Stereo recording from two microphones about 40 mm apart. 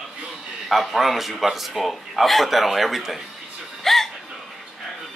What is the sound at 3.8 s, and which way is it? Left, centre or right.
Music, centre.